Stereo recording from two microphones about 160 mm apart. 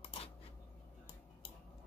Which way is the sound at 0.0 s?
35° left (ahead or behind).